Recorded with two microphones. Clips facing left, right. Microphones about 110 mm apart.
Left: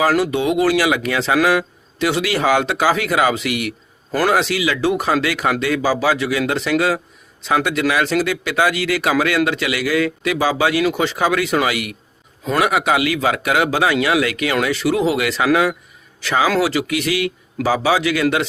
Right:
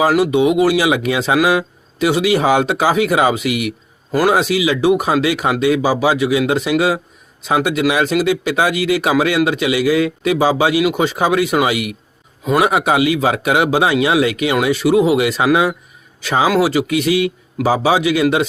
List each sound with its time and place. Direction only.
0.1 s a man's voice: 15° right (ahead or behind)